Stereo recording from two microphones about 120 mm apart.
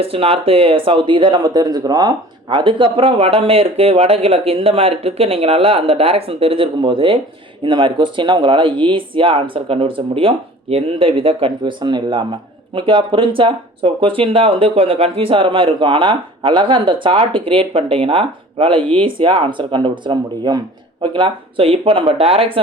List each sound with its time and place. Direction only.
0.0 s speech: 55° right (ahead or behind)